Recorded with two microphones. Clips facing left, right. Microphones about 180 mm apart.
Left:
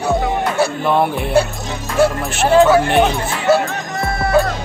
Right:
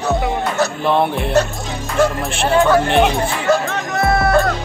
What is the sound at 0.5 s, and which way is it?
Speech, 5° left (ahead or behind).